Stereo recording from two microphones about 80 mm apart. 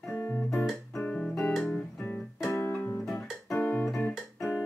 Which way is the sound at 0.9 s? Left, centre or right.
Centre.